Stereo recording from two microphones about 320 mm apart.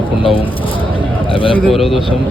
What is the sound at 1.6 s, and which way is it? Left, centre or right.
Speech, centre.